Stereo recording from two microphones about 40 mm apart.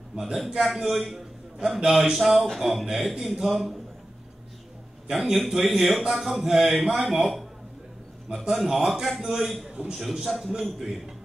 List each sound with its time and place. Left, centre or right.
0.2 s a man's voice: centre
5.1 s a man's voice: centre
9.7 s a man's voice: right
9.9 s a man's voice: centre